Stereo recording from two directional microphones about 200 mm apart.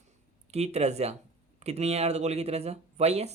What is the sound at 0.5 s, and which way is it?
Speech, 30° right (ahead or behind).